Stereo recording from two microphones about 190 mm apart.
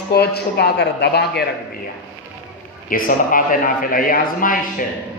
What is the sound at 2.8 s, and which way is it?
A man's voice, 45° left (ahead or behind).